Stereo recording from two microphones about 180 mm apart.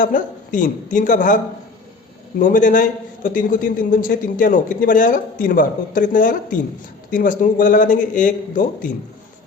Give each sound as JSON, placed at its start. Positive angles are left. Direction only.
{"t": 0.0, "sound": "a man's voice", "side_deg": 45}
{"t": 2.4, "sound": "a man's voice", "side_deg": 45}